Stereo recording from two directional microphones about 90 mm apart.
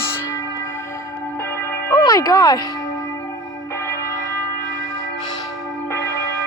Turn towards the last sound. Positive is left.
turn(degrees=35)  # may be behind; listen again after turning